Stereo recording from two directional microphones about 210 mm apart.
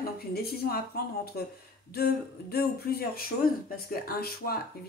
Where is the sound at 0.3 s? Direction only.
45° left (ahead or behind).